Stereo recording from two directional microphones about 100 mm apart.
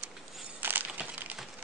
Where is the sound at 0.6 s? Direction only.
20° right (ahead or behind).